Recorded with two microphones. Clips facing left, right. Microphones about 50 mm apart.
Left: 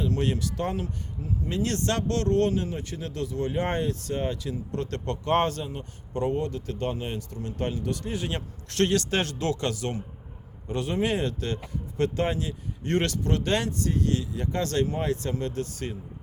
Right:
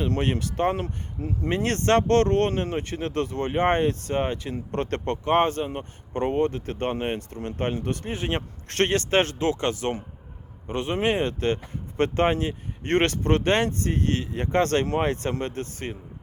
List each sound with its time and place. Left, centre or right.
0.0 s speech: right